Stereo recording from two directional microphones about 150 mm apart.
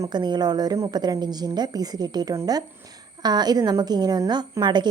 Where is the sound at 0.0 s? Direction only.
30° right (ahead or behind).